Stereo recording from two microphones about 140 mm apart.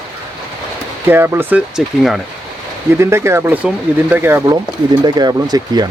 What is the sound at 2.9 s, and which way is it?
Speech, 20° right (ahead or behind).